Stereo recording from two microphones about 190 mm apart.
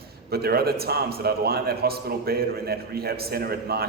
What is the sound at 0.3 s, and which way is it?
A man's voice, 55° right (ahead or behind).